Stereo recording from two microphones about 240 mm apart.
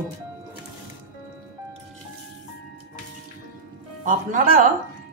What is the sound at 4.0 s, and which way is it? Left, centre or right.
Speech, right.